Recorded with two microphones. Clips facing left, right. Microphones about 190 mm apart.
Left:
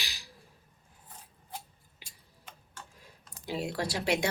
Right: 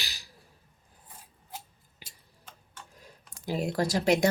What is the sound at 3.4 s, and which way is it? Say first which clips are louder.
Speech: right 4 dB; 45° right (ahead or behind).